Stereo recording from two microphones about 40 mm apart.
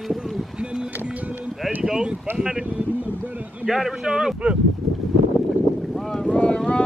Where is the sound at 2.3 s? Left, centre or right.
Centre.